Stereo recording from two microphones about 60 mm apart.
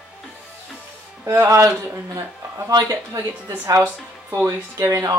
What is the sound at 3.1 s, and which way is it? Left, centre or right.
Speech, right.